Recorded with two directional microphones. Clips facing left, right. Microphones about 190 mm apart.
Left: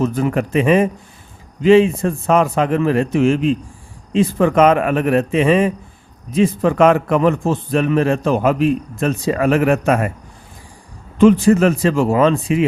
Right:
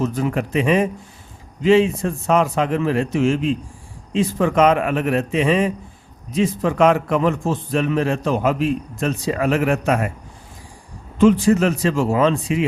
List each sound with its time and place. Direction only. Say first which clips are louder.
0.0 s a man's voice: left 3 dB; 55° left (ahead or behind)
11.2 s a man's voice: left 3 dB; 60° left (ahead or behind)